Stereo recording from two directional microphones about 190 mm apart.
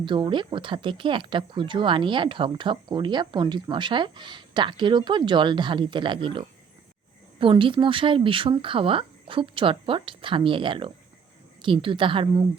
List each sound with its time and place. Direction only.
0.0 s speech: 25° right (ahead or behind)